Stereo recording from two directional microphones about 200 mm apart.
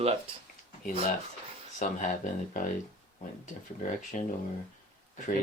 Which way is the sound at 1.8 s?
40° left (ahead or behind).